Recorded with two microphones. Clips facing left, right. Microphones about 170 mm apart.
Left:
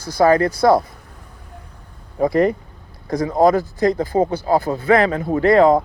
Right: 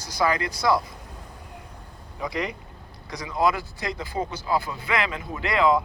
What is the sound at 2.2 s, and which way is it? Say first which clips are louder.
A man's voice: left 13 dB; 50° left (ahead or behind).